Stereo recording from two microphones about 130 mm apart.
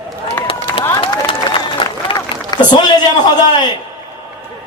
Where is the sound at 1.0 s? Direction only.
40° left (ahead or behind).